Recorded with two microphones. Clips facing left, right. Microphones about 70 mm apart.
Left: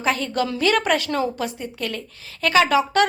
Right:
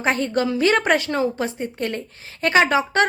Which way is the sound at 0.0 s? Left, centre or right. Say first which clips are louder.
Right 2 dB; right.